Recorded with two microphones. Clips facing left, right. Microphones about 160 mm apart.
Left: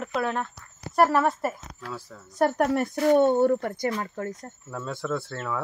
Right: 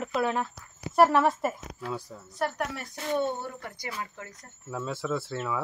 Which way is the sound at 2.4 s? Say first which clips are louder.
Left 9 dB; 50° left (ahead or behind).